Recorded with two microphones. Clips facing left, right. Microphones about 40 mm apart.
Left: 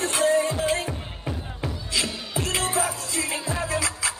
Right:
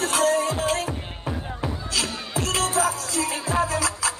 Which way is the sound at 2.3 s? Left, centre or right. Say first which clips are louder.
Right 2 dB; left.